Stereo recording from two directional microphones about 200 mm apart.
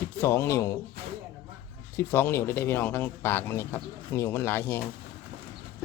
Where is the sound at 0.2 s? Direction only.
10° left (ahead or behind).